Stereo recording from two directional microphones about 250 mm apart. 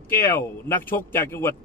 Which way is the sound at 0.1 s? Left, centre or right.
Centre.